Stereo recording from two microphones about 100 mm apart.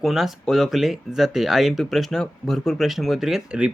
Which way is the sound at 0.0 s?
5° right (ahead or behind).